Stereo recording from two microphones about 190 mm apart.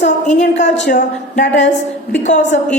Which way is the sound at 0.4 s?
70° left (ahead or behind).